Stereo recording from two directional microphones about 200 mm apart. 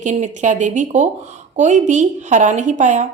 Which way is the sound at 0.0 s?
35° right (ahead or behind).